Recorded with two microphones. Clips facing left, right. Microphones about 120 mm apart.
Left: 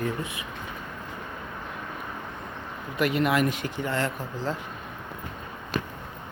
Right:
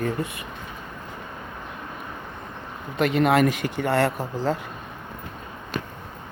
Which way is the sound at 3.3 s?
65° right (ahead or behind).